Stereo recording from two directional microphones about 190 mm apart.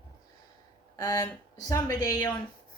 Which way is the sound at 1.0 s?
15° left (ahead or behind).